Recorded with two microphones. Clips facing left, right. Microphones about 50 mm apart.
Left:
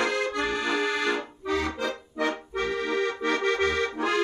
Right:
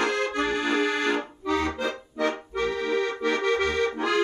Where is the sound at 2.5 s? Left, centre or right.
Left.